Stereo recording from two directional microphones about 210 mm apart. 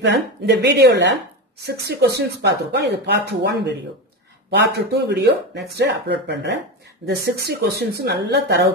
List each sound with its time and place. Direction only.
0.0 s speech: 55° right (ahead or behind)